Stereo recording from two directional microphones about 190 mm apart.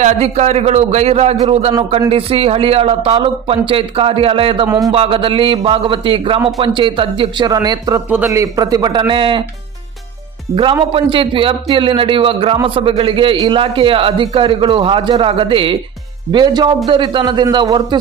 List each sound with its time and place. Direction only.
0.0 s a man's voice: 35° right (ahead or behind)
10.5 s a man's voice: 25° right (ahead or behind)